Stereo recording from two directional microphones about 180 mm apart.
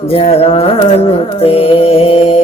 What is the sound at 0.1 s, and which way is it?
Mantra, 35° left (ahead or behind).